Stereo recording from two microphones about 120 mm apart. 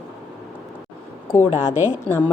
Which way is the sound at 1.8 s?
20° left (ahead or behind).